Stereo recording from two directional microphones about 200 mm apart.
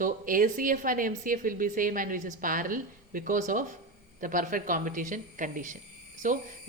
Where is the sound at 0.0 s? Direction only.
40° right (ahead or behind).